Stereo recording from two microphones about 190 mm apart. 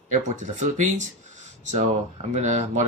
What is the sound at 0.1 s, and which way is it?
Speech, 40° right (ahead or behind).